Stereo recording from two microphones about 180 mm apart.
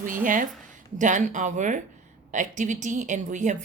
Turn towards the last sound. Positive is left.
turn(degrees=-45)  # may be behind; listen again after turning